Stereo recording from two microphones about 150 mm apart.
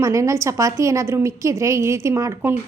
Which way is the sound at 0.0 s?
20° right (ahead or behind).